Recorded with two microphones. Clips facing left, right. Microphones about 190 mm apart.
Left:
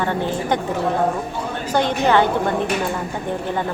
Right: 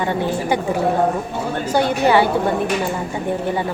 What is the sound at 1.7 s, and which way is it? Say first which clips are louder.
Speech: right 1 dB; 10° right (ahead or behind).